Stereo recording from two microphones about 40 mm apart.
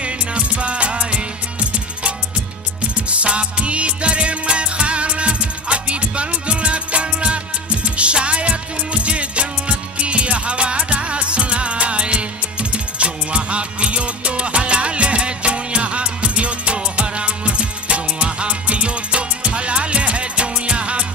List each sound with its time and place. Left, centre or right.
0.0 s music: right